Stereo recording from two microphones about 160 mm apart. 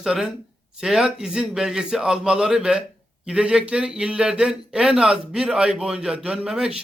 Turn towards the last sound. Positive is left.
turn(degrees=-5)  # may be behind; listen again after turning